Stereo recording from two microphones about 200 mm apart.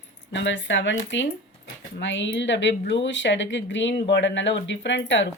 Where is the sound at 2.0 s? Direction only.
65° left (ahead or behind).